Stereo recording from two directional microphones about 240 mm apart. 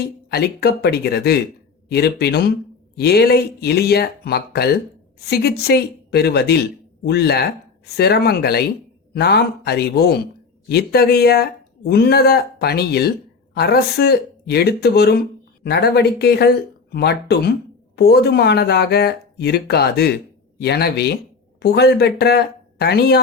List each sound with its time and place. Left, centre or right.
0.3 s speech: left